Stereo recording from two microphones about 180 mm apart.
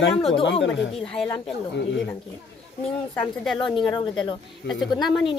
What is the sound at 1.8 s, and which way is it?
Speech, 85° left.